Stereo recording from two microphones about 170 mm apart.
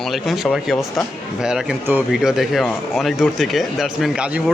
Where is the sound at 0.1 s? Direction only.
Centre (ahead or behind).